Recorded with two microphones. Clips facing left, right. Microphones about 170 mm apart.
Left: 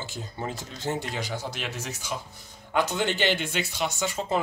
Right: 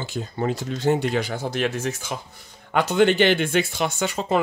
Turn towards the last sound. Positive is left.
turn(degrees=-65)  # may be behind; listen again after turning